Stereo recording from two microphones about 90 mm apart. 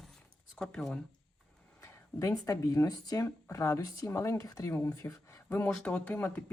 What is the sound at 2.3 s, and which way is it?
Speech, 40° left (ahead or behind).